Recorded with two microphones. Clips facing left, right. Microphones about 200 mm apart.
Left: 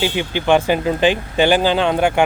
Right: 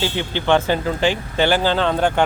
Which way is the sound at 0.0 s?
15° left (ahead or behind).